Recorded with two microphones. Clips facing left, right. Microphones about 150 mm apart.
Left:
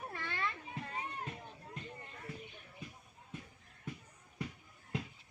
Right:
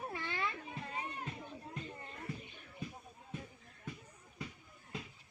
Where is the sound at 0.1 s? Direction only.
15° right (ahead or behind).